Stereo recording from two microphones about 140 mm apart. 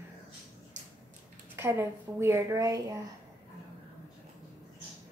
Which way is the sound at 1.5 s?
20° right (ahead or behind).